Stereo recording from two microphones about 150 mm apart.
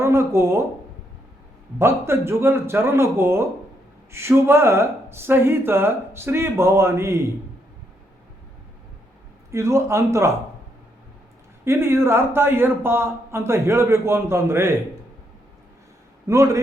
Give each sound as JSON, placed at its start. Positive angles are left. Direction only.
{"t": 0.0, "sound": "speech", "side_deg": -20}
{"t": 1.8, "sound": "a man's voice", "side_deg": -15}
{"t": 9.5, "sound": "a man's voice", "side_deg": -20}
{"t": 11.6, "sound": "a man's voice", "side_deg": -15}
{"t": 16.2, "sound": "a man's voice", "side_deg": -20}